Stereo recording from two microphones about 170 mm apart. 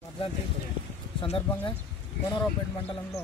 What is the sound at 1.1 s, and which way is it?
Speech, 30° left (ahead or behind).